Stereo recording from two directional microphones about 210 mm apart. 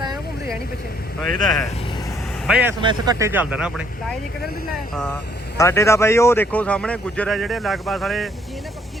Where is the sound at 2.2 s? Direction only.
5° left (ahead or behind).